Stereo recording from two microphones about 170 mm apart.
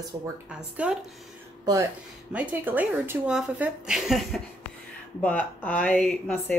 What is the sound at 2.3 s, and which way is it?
A woman's voice, 10° right (ahead or behind).